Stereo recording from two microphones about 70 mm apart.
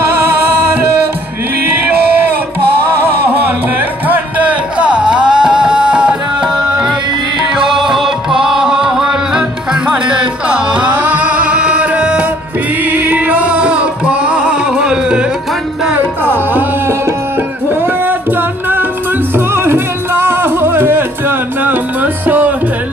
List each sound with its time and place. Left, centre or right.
0.2 s music: right
4.1 s music: centre
16.0 s music: right
19.3 s music: right